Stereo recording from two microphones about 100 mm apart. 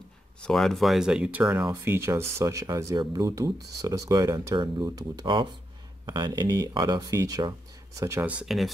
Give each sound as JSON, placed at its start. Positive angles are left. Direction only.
{"t": 0.4, "sound": "speech", "side_deg": 5}
{"t": 1.7, "sound": "speech", "side_deg": -25}
{"t": 5.2, "sound": "speech", "side_deg": -55}
{"t": 8.5, "sound": "speech", "side_deg": 0}